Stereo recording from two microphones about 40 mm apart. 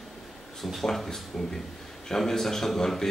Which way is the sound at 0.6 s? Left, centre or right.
Centre.